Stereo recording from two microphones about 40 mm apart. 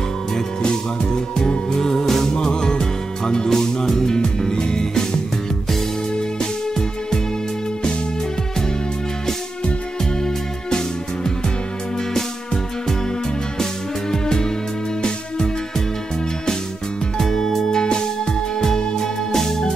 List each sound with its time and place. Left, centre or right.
0.3 s music: centre
14.1 s music: centre
17.2 s music: centre